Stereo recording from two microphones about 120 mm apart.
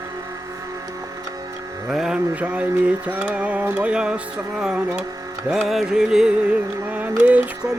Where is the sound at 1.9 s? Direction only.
5° right (ahead or behind).